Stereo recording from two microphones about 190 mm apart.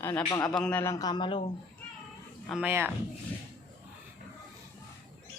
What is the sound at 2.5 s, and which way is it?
Speech, 5° right (ahead or behind).